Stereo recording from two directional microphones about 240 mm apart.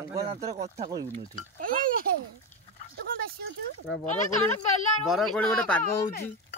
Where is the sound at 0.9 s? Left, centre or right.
Centre.